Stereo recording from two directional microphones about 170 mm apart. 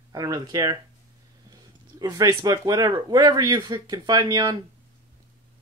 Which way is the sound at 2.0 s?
20° right (ahead or behind).